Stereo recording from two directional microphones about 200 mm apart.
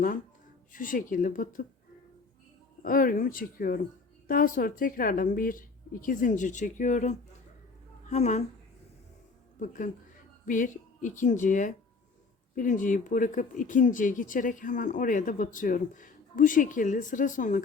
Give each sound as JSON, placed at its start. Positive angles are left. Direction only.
{"t": 0.7, "sound": "a woman's voice", "side_deg": 45}
{"t": 2.8, "sound": "a woman's voice", "side_deg": 45}
{"t": 9.6, "sound": "speech", "side_deg": 40}